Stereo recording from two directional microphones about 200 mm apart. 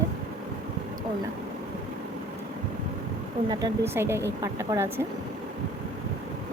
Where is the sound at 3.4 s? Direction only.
20° right (ahead or behind).